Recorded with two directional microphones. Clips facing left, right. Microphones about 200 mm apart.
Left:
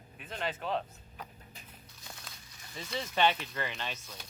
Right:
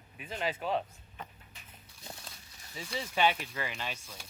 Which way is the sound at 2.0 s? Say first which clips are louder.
Right 3 dB; 35° right (ahead or behind).